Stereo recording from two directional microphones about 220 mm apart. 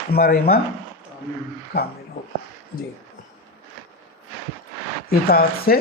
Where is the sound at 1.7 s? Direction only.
45° left (ahead or behind).